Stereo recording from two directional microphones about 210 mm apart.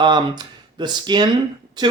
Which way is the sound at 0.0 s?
20° right (ahead or behind).